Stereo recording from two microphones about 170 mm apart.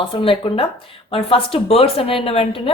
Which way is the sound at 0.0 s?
30° left (ahead or behind).